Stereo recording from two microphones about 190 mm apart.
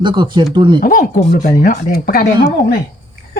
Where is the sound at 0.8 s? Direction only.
45° left (ahead or behind).